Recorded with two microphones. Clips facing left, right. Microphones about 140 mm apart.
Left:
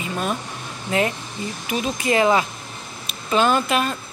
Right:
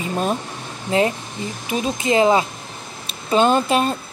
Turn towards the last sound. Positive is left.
turn(degrees=-35)  # may be behind; listen again after turning